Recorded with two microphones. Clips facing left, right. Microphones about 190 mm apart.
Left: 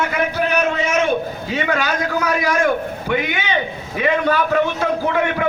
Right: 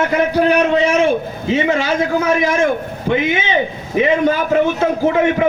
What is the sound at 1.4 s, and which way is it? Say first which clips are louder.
A man's voice: right 7 dB; 25° right (ahead or behind).